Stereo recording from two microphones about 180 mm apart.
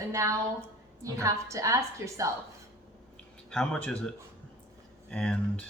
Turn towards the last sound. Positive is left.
turn(degrees=5)  # may be behind; listen again after turning